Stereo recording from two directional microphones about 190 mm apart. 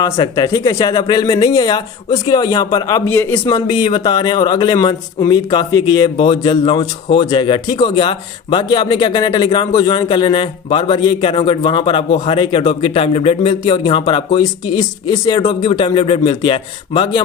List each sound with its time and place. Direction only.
0.0 s a man's voice: 20° left (ahead or behind)
3.4 s a man's voice: 20° left (ahead or behind)